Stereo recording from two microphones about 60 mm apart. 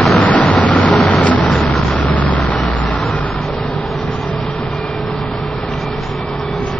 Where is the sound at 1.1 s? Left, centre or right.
Left.